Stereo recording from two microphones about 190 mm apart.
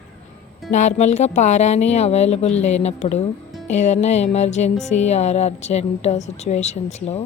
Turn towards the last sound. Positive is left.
turn(degrees=35)  # may be behind; listen again after turning